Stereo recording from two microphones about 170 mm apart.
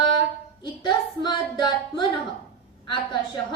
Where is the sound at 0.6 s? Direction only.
25° left (ahead or behind).